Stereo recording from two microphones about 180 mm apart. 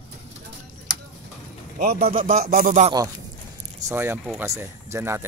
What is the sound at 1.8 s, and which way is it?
Speech, 55° right (ahead or behind).